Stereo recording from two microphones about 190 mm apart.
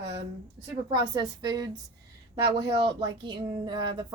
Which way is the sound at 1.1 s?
20° right (ahead or behind).